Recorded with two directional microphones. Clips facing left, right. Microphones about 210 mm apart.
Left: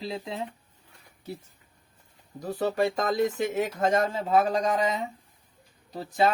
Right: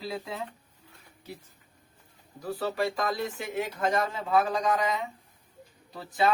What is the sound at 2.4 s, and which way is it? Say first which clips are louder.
Speech: left 4 dB; 40° left (ahead or behind).